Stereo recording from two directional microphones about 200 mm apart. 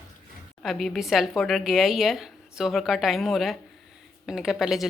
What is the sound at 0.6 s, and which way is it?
Speech, centre (ahead or behind).